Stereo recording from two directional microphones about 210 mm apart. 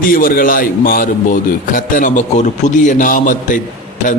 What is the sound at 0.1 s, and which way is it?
A man's voice, 40° left (ahead or behind).